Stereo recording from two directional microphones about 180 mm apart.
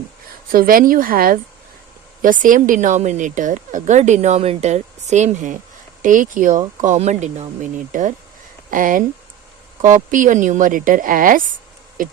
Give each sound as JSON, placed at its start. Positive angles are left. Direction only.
{"t": 0.5, "sound": "speech", "side_deg": -50}
{"t": 12.0, "sound": "owl", "side_deg": -50}